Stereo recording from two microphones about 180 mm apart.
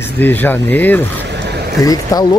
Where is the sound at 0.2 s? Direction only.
10° left (ahead or behind).